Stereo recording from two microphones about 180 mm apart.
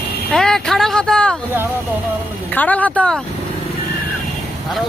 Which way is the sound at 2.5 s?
10° left (ahead or behind).